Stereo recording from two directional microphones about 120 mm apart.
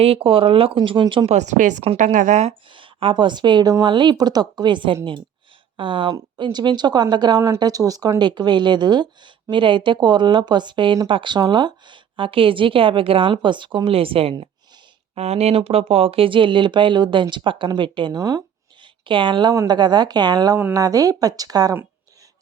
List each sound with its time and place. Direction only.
0.0 s speech: 50° right (ahead or behind)
0.8 s speech: 40° right (ahead or behind)
1.3 s speech: 80° right
2.7 s speech: 45° right (ahead or behind); by 18.4 s 30° right (ahead or behind)
19.0 s a woman's voice: 40° right (ahead or behind)